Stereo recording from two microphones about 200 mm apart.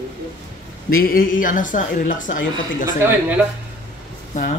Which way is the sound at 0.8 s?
45° left (ahead or behind).